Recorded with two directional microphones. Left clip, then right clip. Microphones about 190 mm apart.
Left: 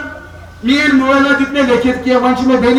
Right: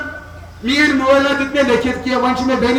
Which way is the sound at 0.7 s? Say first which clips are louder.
Left 1 dB; 50° right (ahead or behind).